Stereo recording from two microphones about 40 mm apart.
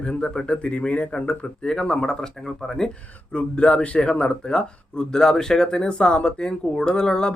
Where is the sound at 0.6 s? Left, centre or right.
Left.